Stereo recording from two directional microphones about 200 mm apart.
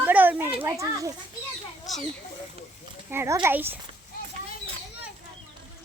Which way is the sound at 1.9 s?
Centre (ahead or behind).